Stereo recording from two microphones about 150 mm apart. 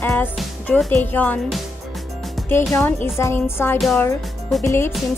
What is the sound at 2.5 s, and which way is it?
Speech, 15° left (ahead or behind).